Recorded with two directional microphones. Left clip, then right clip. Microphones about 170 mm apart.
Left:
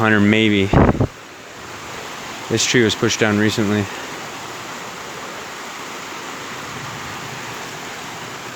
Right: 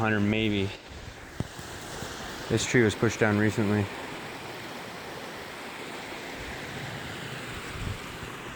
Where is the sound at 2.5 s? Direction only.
25° left (ahead or behind).